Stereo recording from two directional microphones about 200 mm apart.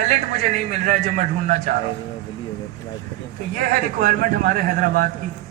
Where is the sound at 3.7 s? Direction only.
45° right (ahead or behind).